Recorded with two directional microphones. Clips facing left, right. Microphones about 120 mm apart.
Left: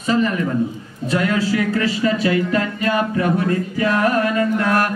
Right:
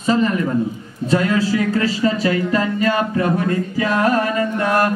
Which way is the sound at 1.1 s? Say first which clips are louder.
Right 2 dB; 30° right (ahead or behind).